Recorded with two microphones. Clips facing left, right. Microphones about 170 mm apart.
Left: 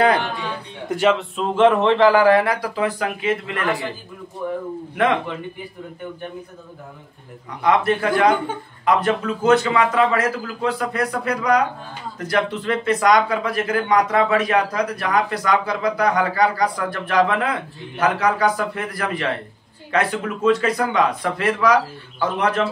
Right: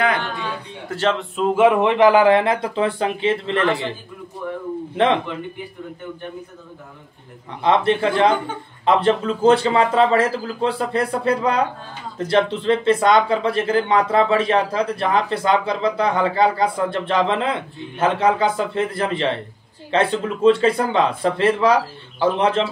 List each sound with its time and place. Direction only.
0.8 s speech: 15° left (ahead or behind)
1.1 s speech: 5° right (ahead or behind); by 3.9 s 25° right (ahead or behind)
4.9 s speech: 25° right (ahead or behind)
7.6 s speech: 25° right (ahead or behind)